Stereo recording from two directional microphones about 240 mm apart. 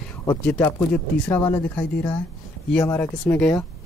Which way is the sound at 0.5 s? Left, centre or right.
Centre.